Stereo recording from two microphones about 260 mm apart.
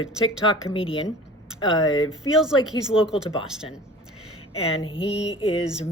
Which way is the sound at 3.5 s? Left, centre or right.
Centre.